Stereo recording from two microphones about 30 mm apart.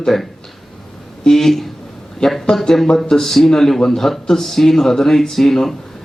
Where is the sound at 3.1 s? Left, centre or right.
Centre.